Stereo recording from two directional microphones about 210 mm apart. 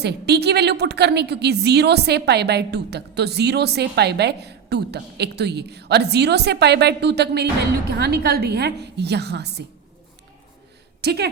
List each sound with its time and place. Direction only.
0.0 s a woman's voice: 50° right (ahead or behind)
11.0 s a woman's voice: 50° right (ahead or behind)